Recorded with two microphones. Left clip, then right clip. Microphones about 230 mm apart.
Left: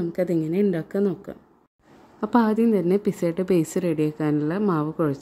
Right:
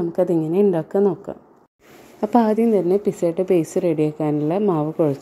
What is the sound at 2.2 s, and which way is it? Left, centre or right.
Speech, left.